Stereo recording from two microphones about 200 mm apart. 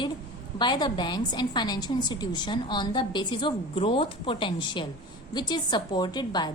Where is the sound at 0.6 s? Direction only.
20° left (ahead or behind).